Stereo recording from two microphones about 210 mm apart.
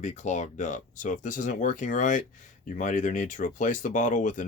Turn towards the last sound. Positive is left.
turn(degrees=35)  # may be behind; listen again after turning